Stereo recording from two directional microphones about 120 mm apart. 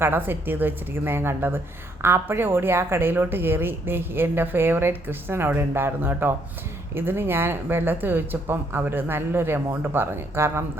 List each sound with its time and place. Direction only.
0.3 s a woman's voice: 15° right (ahead or behind)